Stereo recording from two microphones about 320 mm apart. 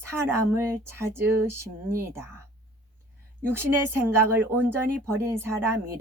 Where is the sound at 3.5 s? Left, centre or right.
Centre.